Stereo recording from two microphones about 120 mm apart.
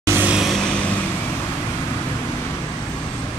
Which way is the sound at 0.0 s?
20° right (ahead or behind).